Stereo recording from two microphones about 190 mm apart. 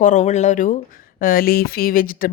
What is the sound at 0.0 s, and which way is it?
Speech, 40° left (ahead or behind).